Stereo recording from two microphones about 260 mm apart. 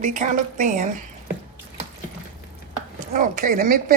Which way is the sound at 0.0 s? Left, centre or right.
Right.